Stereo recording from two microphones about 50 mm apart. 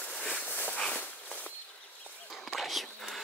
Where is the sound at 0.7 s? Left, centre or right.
Left.